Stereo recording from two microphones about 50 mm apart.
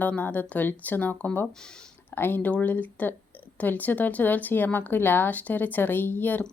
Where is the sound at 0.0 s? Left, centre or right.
Left.